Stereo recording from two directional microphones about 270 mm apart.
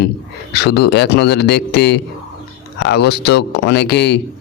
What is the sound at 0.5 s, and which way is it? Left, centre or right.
Speech, left.